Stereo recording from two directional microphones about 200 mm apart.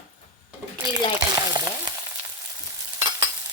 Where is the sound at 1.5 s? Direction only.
20° right (ahead or behind).